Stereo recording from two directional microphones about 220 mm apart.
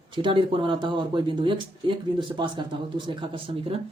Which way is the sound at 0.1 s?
20° right (ahead or behind).